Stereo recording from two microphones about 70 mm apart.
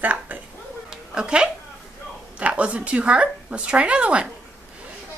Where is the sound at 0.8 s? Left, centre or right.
Centre.